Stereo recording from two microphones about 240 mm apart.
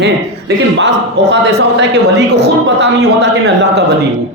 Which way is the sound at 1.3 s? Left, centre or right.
Right.